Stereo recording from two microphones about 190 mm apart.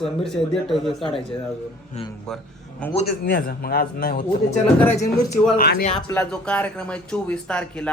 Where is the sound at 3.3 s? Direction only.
50° left (ahead or behind).